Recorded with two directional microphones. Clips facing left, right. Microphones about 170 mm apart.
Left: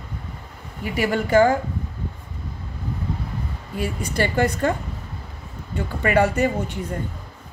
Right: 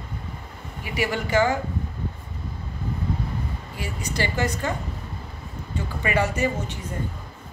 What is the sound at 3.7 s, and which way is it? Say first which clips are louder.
Speech: left 6 dB; 55° left (ahead or behind).